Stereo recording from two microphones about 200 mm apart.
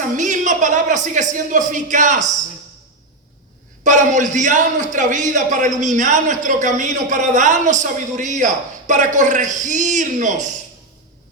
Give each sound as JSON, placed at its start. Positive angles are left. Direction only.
{"t": 0.1, "sound": "a man's voice", "side_deg": -40}
{"t": 3.8, "sound": "a man's voice", "side_deg": -40}